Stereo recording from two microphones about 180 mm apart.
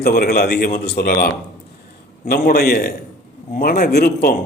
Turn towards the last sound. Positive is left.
turn(degrees=55)  # may be behind; listen again after turning